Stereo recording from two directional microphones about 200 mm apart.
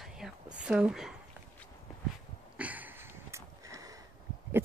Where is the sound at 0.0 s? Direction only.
5° right (ahead or behind).